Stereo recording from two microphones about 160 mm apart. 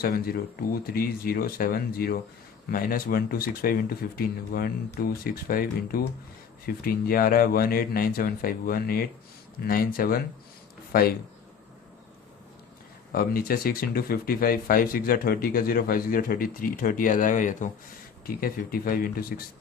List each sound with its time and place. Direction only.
0.9 s speech: 70° left (ahead or behind)
13.1 s speech: 65° left (ahead or behind)
18.3 s speech: 65° left (ahead or behind)